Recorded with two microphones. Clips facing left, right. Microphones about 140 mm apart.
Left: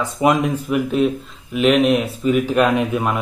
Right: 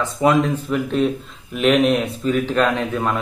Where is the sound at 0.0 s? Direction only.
15° left (ahead or behind).